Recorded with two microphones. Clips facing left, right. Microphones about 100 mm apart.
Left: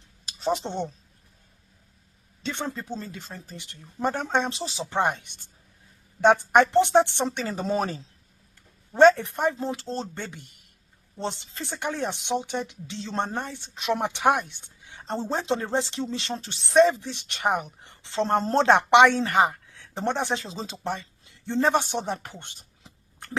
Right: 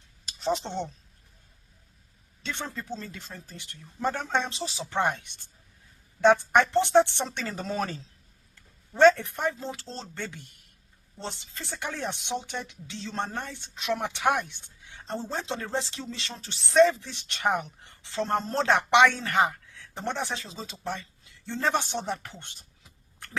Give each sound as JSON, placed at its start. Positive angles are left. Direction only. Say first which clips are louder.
{"t": 0.3, "sound": "speech", "louder": "left 2 dB", "side_deg": 15}
{"t": 2.4, "sound": "a woman's voice", "louder": "left 4 dB", "side_deg": 20}
{"t": 6.2, "sound": "a woman's voice", "louder": "left 2 dB", "side_deg": 20}
{"t": 19.2, "sound": "a sound", "louder": "left 3 dB", "side_deg": 15}
{"t": 20.3, "sound": "speech", "louder": "left 6 dB", "side_deg": 25}